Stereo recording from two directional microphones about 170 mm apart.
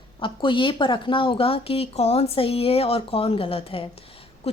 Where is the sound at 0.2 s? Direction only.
30° left (ahead or behind).